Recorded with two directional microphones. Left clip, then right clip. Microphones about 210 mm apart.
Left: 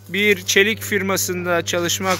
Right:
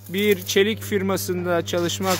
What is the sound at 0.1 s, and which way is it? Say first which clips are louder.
Speech: left 4 dB; 10° right (ahead or behind).